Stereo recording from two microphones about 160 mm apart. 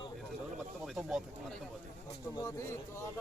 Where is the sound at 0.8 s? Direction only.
5° right (ahead or behind).